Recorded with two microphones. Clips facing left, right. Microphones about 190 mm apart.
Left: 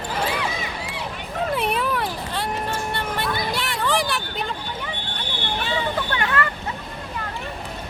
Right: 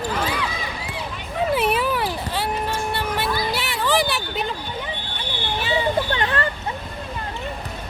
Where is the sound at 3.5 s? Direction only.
5° right (ahead or behind).